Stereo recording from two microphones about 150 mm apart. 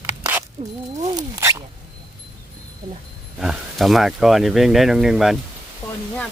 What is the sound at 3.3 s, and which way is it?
Speech, 5° right (ahead or behind).